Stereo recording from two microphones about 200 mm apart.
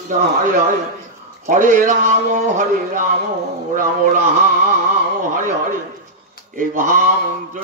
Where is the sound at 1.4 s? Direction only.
40° right (ahead or behind).